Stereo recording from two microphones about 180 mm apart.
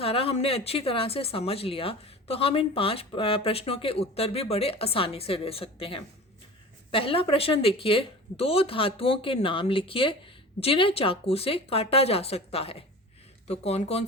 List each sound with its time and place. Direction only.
0.0 s speech: 30° left (ahead or behind)